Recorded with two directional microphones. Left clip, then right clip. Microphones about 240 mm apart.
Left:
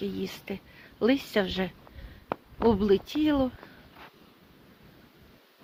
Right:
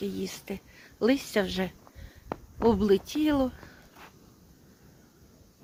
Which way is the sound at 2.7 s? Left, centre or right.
Centre.